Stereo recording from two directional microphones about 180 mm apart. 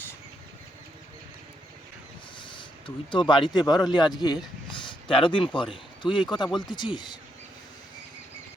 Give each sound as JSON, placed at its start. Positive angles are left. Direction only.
{"t": 2.4, "sound": "speech", "side_deg": 25}
{"t": 4.7, "sound": "a sound", "side_deg": 30}
{"t": 5.5, "sound": "speech", "side_deg": 25}